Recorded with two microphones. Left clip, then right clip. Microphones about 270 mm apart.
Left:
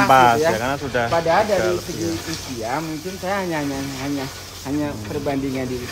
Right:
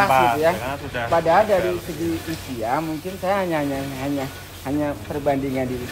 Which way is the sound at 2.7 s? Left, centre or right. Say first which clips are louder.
Right 2 dB; centre.